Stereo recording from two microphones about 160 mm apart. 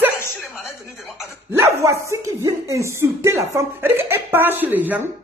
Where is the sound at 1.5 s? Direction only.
20° right (ahead or behind).